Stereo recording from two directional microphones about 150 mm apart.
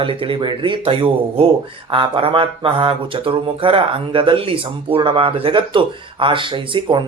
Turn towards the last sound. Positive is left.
turn(degrees=-30)  # may be behind; listen again after turning